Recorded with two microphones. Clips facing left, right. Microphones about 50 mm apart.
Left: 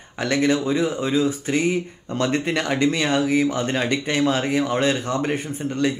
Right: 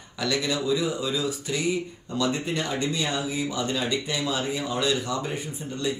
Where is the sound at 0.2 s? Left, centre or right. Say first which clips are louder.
Left 6 dB; left.